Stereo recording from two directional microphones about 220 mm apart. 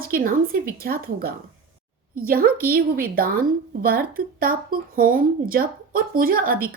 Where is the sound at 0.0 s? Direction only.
40° right (ahead or behind).